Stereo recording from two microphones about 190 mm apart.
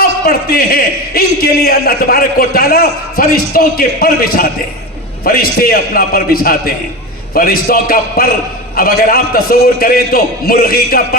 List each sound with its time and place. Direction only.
0.0 s a man's voice: 55° left (ahead or behind)